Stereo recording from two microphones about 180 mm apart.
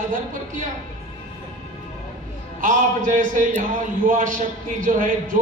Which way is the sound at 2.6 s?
45° right (ahead or behind).